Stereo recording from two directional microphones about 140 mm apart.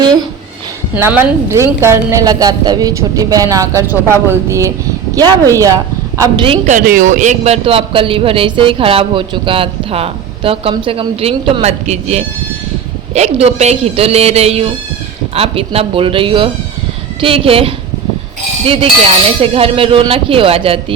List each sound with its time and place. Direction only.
0.0 s a sound: 30° right (ahead or behind)
0.9 s a woman's voice: 15° right (ahead or behind)
6.7 s speech: 75° right (ahead or behind); by 20.7 s 40° right (ahead or behind)